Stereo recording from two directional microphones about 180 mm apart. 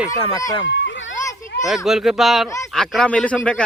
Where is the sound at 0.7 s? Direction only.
85° left.